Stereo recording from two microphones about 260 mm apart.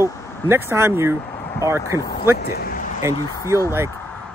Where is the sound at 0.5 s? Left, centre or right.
Centre.